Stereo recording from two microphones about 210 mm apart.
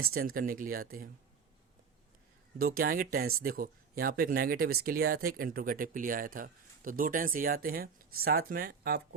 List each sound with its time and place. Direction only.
0.3 s speech: 40° right (ahead or behind)
2.6 s speech: 45° right (ahead or behind)